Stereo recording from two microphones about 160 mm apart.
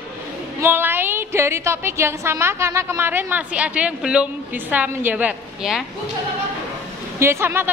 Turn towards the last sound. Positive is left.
turn(degrees=-15)  # may be behind; listen again after turning